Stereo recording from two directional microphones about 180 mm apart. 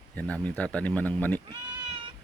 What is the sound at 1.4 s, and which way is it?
Cat, 25° right (ahead or behind).